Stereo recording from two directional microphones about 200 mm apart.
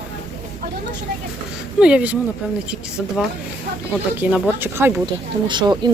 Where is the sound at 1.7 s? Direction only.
5° right (ahead or behind).